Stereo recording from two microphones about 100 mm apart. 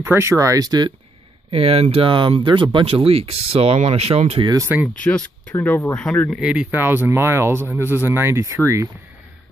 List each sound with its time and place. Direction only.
0.0 s speech: 25° right (ahead or behind); by 0.9 s 45° right (ahead or behind)
1.5 s speech: 75° right (ahead or behind); by 2.8 s 50° right (ahead or behind)
2.9 s speech: 75° right (ahead or behind)
4.9 s speech: 15° left (ahead or behind)
6.3 s speech: 10° right (ahead or behind); by 8.8 s 30° right (ahead or behind)